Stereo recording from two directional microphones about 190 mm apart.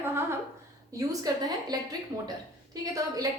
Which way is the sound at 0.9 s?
20° right (ahead or behind).